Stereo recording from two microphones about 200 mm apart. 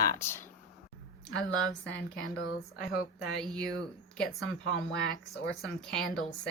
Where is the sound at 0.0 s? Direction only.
15° left (ahead or behind).